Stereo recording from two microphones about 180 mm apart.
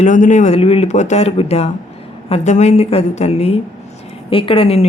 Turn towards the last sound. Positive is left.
turn(degrees=35)  # may be behind; listen again after turning